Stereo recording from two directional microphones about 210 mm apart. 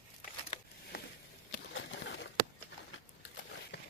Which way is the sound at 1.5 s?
60° left (ahead or behind).